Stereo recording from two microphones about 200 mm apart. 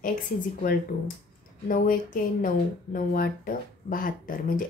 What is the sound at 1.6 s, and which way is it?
Speech, 45° left (ahead or behind).